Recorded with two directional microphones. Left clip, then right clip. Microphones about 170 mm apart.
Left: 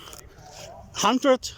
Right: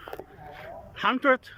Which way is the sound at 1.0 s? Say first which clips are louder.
Left 2 dB; 25° left (ahead or behind).